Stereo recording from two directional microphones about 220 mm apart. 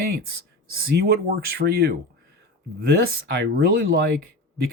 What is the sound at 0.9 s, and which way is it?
Speech, 45° right (ahead or behind).